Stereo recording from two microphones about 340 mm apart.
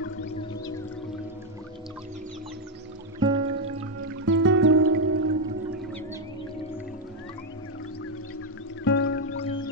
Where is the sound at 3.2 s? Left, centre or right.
Centre.